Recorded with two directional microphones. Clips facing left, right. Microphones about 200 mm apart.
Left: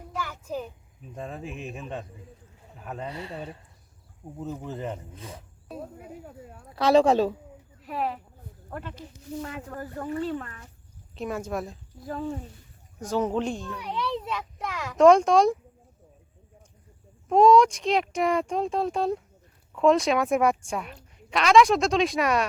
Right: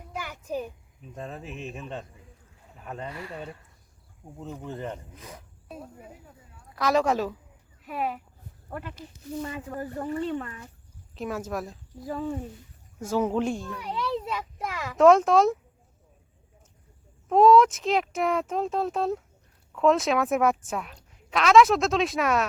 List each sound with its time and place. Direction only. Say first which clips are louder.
0.2 s a sound: even; 15° right (ahead or behind)
1.1 s a woman's voice: left 2 dB; centre (ahead or behind)
3.1 s a woman's voice: left 1 dB; 25° left (ahead or behind)
4.4 s a woman's voice: left 2 dB; 5° left (ahead or behind)
5.1 s a woman's voice: left 3 dB; 30° left (ahead or behind)
6.7 s a woman's voice: left 5 dB; 30° left (ahead or behind)
7.9 s a woman's voice: left 1 dB; 5° right (ahead or behind)
9.4 s speech: right 3 dB; 15° right (ahead or behind)
10.1 s a woman's voice: left 1 dB; centre (ahead or behind)
13.1 s a woman's voice: right 1 dB; 10° right (ahead or behind)
17.2 s a woman's voice: even; 5° right (ahead or behind)